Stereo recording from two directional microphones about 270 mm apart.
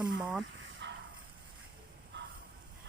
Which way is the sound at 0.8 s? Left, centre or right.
Right.